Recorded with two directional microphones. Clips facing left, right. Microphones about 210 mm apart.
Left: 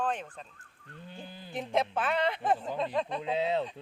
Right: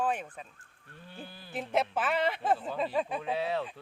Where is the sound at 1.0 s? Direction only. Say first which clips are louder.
Left 1 dB; 20° left (ahead or behind).